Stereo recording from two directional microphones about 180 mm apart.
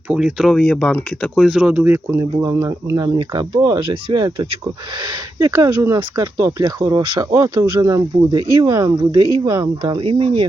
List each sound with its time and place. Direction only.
0.1 s speech: 5° right (ahead or behind); by 10.4 s 30° right (ahead or behind)